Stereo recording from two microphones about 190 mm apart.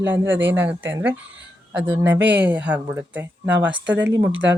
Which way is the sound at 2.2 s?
70° right (ahead or behind).